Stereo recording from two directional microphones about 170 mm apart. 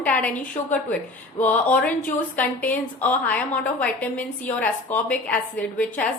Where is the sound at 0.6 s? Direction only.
40° left (ahead or behind).